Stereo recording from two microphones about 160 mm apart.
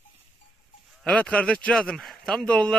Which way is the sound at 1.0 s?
5° left (ahead or behind).